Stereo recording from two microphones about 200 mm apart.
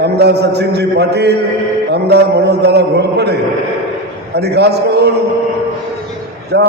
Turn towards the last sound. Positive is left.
turn(degrees=-55)  # may be behind; listen again after turning